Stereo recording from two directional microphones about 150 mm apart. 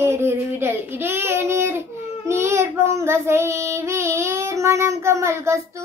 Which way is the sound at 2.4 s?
20° right (ahead or behind).